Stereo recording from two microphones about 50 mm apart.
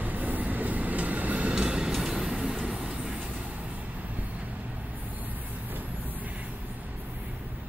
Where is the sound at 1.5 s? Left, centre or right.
Centre.